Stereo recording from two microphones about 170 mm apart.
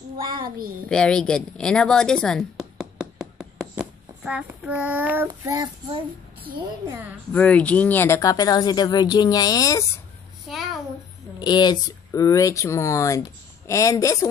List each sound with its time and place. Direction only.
0.4 s a child's voice: 60° right (ahead or behind)
0.8 s a sound: 5° left (ahead or behind)
5.3 s child singing: 20° right (ahead or behind)
7.3 s speech: 10° left (ahead or behind)
10.5 s a child's voice: centre (ahead or behind)
11.3 s speech: 25° left (ahead or behind)